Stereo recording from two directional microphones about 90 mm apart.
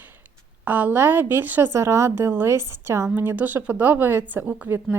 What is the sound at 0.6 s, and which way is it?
A woman's voice, 20° right (ahead or behind).